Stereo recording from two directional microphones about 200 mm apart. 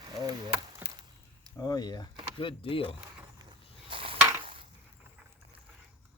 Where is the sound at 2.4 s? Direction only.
25° left (ahead or behind).